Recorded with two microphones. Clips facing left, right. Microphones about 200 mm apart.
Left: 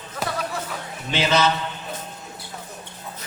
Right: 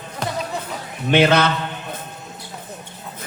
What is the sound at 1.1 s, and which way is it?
Speech, 60° right (ahead or behind).